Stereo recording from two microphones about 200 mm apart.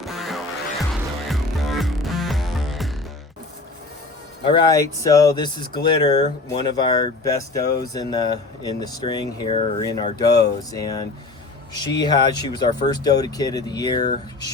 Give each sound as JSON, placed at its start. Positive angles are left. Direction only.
{"t": 0.0, "sound": "music", "side_deg": 0}
{"t": 4.5, "sound": "speech", "side_deg": 15}